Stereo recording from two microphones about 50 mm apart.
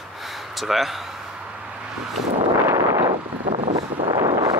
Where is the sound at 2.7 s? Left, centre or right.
Right.